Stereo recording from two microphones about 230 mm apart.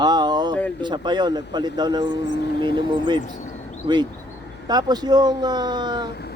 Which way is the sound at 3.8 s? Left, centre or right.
Centre.